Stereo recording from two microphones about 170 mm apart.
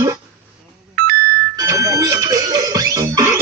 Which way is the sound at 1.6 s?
20° right (ahead or behind).